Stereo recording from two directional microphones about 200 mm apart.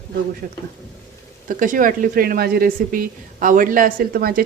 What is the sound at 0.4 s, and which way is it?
Speech, 45° right (ahead or behind).